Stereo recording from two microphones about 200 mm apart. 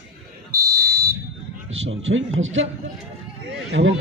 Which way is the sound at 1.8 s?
75° right (ahead or behind).